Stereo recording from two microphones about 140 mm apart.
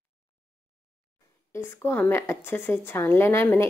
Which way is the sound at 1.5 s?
20° left (ahead or behind).